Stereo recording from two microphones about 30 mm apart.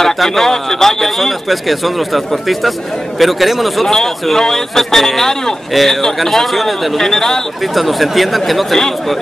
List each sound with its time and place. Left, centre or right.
0.2 s a man's voice: centre
3.9 s a man's voice: centre
7.1 s a man's voice: centre
7.7 s a man's voice: centre